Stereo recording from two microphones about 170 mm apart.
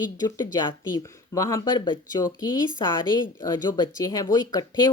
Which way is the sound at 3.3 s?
25° left (ahead or behind).